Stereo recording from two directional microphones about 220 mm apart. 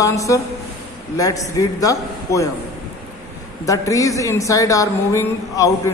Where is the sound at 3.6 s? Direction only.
15° left (ahead or behind).